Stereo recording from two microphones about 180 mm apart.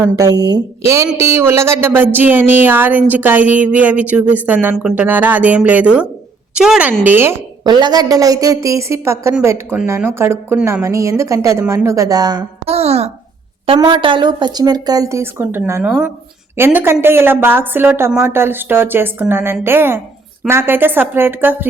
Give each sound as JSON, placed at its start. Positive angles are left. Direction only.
{"t": 0.2, "sound": "a woman's voice", "side_deg": -20}
{"t": 12.6, "sound": "a child's voice", "side_deg": -35}